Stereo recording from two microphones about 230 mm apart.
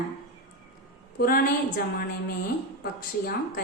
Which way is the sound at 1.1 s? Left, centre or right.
Left.